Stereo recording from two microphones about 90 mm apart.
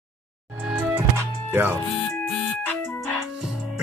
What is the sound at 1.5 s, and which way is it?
Speech, 25° right (ahead or behind).